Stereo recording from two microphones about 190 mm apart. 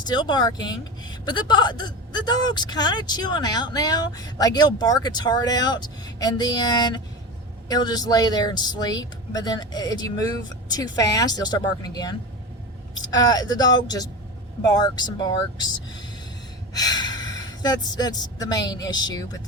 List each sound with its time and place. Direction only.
0.0 s a woman's voice: 20° left (ahead or behind)